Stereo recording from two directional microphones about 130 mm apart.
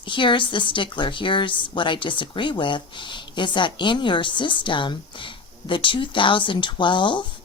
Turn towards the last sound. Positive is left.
turn(degrees=40)  # may be behind; listen again after turning